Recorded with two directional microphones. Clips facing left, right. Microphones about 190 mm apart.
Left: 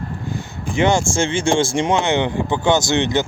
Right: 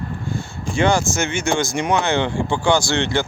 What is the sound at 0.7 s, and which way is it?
Speech, 20° left (ahead or behind).